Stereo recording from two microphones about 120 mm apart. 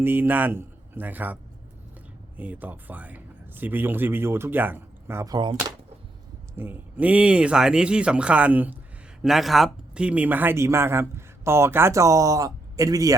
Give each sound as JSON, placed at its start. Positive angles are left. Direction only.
{"t": 0.0, "sound": "speech", "side_deg": -15}
{"t": 5.3, "sound": "speech", "side_deg": -40}
{"t": 6.6, "sound": "speech", "side_deg": -15}
{"t": 9.2, "sound": "speech", "side_deg": 0}